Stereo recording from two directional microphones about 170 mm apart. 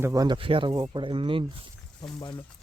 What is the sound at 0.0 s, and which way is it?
Speech, 20° right (ahead or behind).